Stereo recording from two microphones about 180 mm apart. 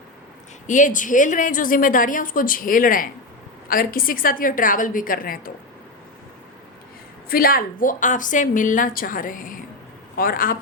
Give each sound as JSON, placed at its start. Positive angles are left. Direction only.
{"t": 0.7, "sound": "a woman's voice", "side_deg": 45}
{"t": 7.3, "sound": "a woman's voice", "side_deg": 55}